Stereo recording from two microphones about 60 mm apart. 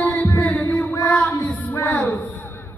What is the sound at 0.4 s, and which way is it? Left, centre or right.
Heart murmur, left.